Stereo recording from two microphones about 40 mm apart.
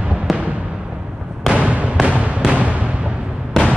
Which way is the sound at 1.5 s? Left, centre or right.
Right.